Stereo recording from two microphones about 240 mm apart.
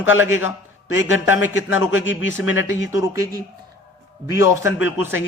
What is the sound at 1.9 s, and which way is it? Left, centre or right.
Speech, left.